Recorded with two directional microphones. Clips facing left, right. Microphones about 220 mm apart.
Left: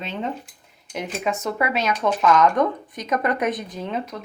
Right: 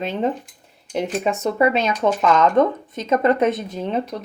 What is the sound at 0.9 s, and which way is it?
Speech, 30° right (ahead or behind).